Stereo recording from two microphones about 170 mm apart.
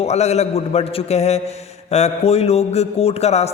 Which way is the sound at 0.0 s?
40° left (ahead or behind).